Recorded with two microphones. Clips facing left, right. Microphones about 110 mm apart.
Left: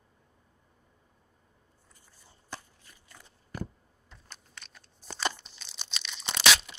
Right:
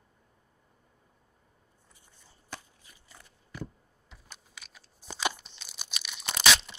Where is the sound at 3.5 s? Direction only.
45° left (ahead or behind).